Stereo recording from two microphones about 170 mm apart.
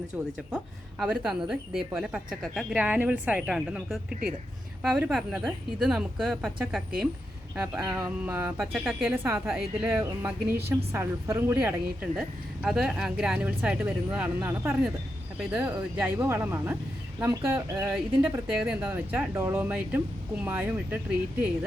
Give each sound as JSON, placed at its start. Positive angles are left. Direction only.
{"t": 0.3, "sound": "speech", "side_deg": -5}
{"t": 9.0, "sound": "speech", "side_deg": -10}
{"t": 10.0, "sound": "speech", "side_deg": -15}